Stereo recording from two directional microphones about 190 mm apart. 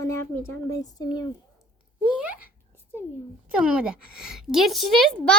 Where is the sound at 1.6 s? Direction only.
5° right (ahead or behind).